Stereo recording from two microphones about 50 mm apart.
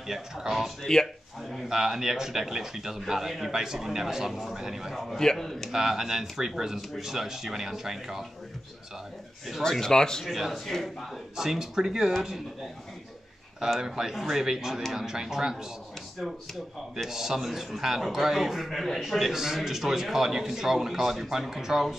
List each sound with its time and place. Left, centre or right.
0.0 s a man's voice: centre
0.9 s speech: centre
1.7 s a man's voice: centre
5.7 s a man's voice: centre
9.6 s speech: centre
10.2 s a man's voice: centre
11.3 s a man's voice: centre
13.7 s a man's voice: centre
16.9 s a man's voice: centre